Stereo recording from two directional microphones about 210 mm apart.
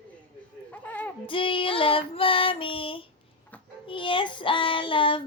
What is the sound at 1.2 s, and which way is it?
Child singing, 25° left (ahead or behind).